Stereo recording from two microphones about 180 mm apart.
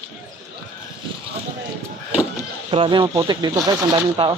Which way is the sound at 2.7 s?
30° right (ahead or behind).